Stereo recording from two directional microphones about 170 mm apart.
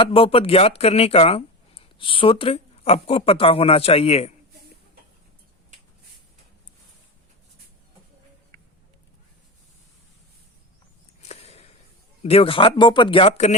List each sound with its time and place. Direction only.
0.0 s speech: 35° left (ahead or behind)
11.2 s a sound: 40° left (ahead or behind)
12.2 s speech: 35° left (ahead or behind)